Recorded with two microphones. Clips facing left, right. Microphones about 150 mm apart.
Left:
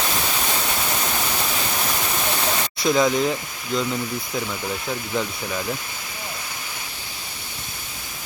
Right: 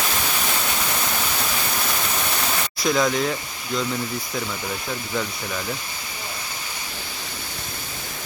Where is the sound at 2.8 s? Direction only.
5° left (ahead or behind).